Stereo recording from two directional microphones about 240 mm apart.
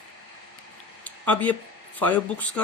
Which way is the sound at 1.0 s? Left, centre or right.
Centre.